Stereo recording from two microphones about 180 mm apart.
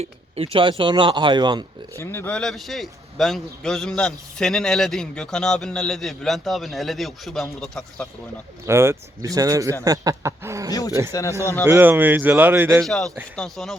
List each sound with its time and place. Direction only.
0.0 s speech: 35° right (ahead or behind)
2.0 s a man's voice: 10° left (ahead or behind)
8.6 s speech: 15° right (ahead or behind)
10.7 s speech: 20° left (ahead or behind)
11.6 s speech: 10° right (ahead or behind)
12.8 s a man's voice: 5° left (ahead or behind)